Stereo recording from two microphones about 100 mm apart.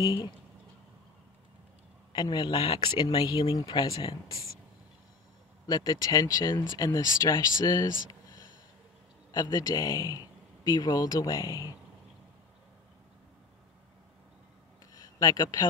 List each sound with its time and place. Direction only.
0.0 s speech: 40° left (ahead or behind)
2.1 s speech: 45° left (ahead or behind)
5.7 s speech: 40° left (ahead or behind)
15.0 s speech: 35° left (ahead or behind)